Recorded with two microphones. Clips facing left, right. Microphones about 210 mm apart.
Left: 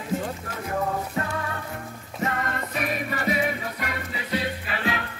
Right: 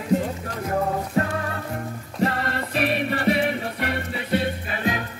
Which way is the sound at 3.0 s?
65° right (ahead or behind).